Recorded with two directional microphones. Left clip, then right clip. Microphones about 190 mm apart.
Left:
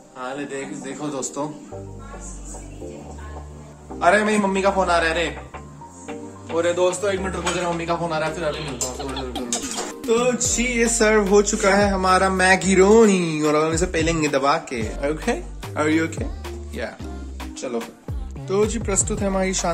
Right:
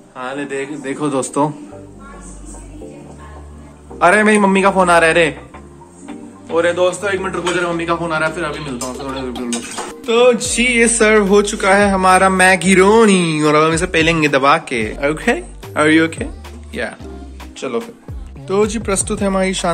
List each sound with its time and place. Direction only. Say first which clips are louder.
0.2 s a man's voice: right 6 dB; 15° right (ahead or behind)
0.8 s a man's voice: right 12 dB; 35° right (ahead or behind)
4.0 s a man's voice: right 6 dB; 40° right (ahead or behind)
6.0 s speech: right 3 dB; centre (ahead or behind)